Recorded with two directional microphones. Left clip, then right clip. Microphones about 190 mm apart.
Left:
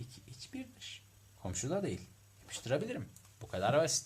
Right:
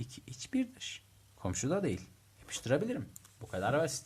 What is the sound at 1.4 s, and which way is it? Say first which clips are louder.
Speech: right 3 dB; 15° right (ahead or behind).